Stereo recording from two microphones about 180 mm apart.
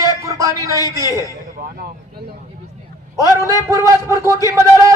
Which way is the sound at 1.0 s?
20° left (ahead or behind).